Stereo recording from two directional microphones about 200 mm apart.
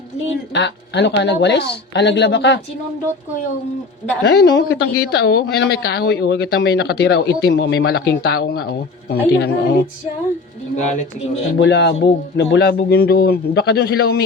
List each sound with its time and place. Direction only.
0.5 s speech: 60° left (ahead or behind)
4.2 s speech: 60° left (ahead or behind)
11.6 s a man's voice: 60° left (ahead or behind)